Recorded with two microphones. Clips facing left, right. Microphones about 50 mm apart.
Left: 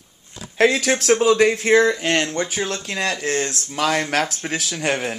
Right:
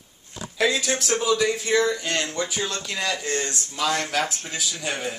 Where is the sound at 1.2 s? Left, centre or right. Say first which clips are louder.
Left 5 dB; left.